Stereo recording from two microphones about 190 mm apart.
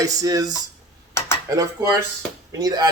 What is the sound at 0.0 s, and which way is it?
Speech, 20° right (ahead or behind).